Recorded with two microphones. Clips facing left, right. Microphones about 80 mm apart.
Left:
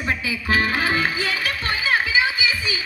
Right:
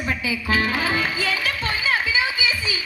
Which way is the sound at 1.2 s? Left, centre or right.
Right.